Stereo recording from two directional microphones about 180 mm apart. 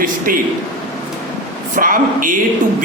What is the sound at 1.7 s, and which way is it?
Speech, 50° right (ahead or behind).